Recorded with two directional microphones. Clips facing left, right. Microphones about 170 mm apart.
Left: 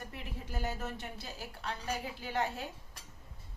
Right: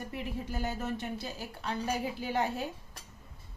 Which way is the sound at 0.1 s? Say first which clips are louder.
Right 6 dB; 5° right (ahead or behind).